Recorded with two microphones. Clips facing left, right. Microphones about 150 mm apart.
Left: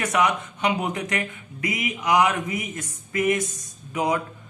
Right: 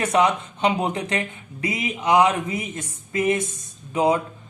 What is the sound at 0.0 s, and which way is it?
A man's voice, 30° right (ahead or behind).